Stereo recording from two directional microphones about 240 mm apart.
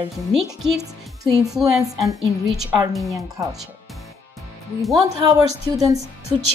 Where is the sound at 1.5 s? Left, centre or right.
Centre.